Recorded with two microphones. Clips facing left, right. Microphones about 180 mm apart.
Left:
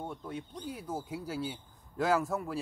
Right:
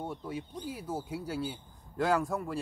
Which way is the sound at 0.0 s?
5° right (ahead or behind).